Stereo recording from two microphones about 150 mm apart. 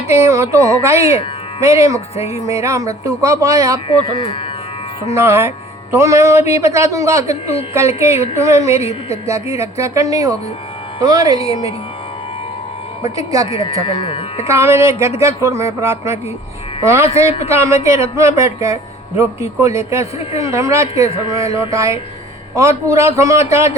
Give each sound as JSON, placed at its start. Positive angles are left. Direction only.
{"t": 0.1, "sound": "speech", "side_deg": -20}
{"t": 3.8, "sound": "speech", "side_deg": 35}
{"t": 5.0, "sound": "speech", "side_deg": -20}
{"t": 11.3, "sound": "speech", "side_deg": 40}
{"t": 13.1, "sound": "speech", "side_deg": -20}
{"t": 13.5, "sound": "speech", "side_deg": 40}
{"t": 14.4, "sound": "speech", "side_deg": -20}